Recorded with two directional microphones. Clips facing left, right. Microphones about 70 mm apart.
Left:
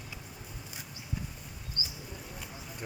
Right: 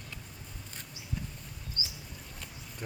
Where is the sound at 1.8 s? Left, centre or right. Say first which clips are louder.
Even; left.